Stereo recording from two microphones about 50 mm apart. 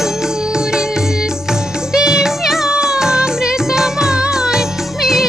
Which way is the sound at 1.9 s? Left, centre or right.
Centre.